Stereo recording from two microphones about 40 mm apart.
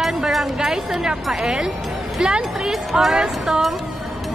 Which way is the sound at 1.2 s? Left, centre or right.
Centre.